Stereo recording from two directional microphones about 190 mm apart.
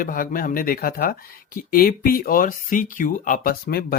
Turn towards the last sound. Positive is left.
turn(degrees=55)  # may be behind; listen again after turning